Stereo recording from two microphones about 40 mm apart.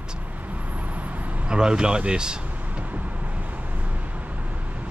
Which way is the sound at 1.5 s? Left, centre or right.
Centre.